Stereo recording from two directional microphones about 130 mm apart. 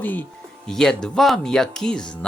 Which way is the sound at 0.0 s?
15° left (ahead or behind).